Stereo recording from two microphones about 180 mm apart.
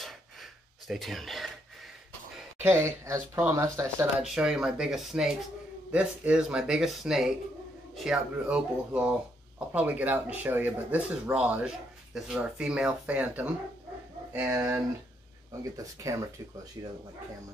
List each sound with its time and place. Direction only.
0.0 s a sound: centre (ahead or behind)
2.6 s speech: 15° right (ahead or behind)
4.2 s speech: 5° right (ahead or behind)
15.8 s speech: 20° right (ahead or behind)